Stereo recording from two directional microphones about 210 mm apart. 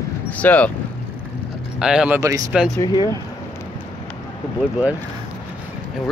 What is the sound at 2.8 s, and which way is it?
Speech, 20° left (ahead or behind).